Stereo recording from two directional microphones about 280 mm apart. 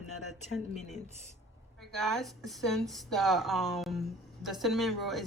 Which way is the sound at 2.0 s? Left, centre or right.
Centre.